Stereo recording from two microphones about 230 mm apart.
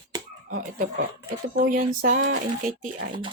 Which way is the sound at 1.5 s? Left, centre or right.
Right.